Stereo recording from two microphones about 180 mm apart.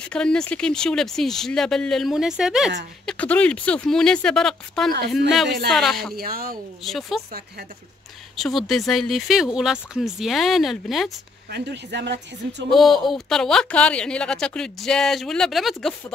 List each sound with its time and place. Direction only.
0.1 s a woman's voice: 5° left (ahead or behind)
3.1 s a woman's voice: 5° left (ahead or behind)
6.1 s speech: 55° right (ahead or behind)
6.8 s a woman's voice: centre (ahead or behind)
8.4 s a woman's voice: centre (ahead or behind)
11.5 s speech: 70° right (ahead or behind)
12.7 s a woman's voice: centre (ahead or behind)